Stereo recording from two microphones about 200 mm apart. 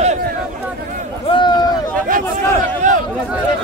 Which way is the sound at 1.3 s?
20° left (ahead or behind).